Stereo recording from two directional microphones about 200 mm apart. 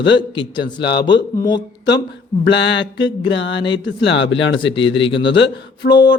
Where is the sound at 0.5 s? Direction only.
60° left (ahead or behind).